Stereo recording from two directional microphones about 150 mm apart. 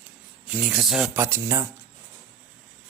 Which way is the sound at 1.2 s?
15° right (ahead or behind).